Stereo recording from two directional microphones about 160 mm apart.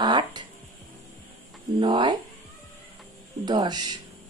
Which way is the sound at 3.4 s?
25° right (ahead or behind).